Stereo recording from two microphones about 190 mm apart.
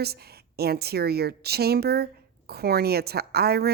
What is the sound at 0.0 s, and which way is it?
A woman's voice, 55° right (ahead or behind).